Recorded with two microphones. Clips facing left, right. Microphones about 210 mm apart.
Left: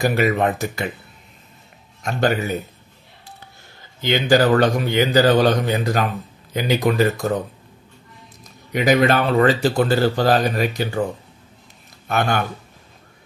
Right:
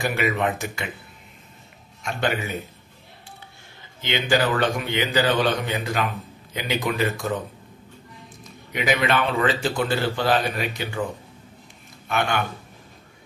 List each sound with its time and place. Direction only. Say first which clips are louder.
0.0 s speech: left 5 dB; 40° left (ahead or behind)
2.0 s speech: left 5 dB; 40° left (ahead or behind)
4.0 s speech: left 6 dB; 40° left (ahead or behind)
8.5 s speech: left 6 dB; 40° left (ahead or behind)
12.1 s speech: left 3 dB; 40° left (ahead or behind)